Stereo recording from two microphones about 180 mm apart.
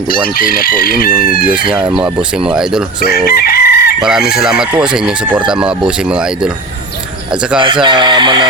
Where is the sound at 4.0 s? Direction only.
5° right (ahead or behind).